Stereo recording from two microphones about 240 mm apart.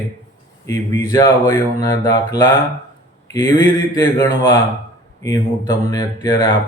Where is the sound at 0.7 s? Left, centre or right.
Centre.